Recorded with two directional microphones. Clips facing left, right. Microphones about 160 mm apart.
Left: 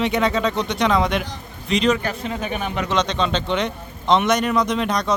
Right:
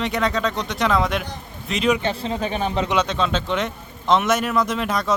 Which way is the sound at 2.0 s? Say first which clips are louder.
Right 2 dB; 30° right (ahead or behind).